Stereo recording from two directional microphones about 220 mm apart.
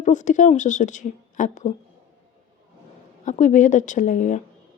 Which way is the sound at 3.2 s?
35° left (ahead or behind).